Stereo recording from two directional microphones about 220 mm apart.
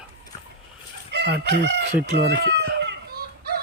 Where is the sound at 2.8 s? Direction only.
45° right (ahead or behind).